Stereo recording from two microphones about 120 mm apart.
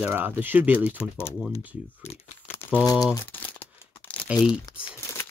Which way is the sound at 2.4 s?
20° left (ahead or behind).